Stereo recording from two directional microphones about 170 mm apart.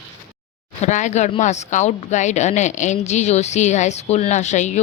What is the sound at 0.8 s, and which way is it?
A woman's voice, 45° left (ahead or behind).